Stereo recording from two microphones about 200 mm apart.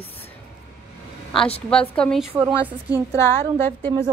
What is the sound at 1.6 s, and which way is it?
A woman's voice, 5° left (ahead or behind).